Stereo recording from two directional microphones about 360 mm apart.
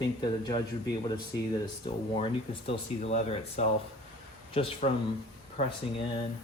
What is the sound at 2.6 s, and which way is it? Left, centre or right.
Speech, centre.